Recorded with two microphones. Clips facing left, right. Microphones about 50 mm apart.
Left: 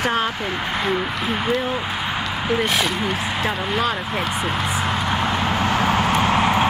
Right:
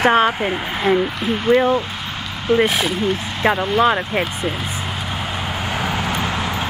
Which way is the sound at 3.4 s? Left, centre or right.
Right.